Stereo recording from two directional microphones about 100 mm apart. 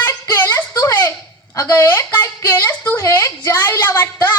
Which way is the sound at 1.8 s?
20° left (ahead or behind).